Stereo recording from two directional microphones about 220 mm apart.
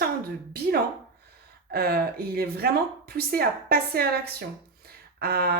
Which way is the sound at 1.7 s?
45° right (ahead or behind).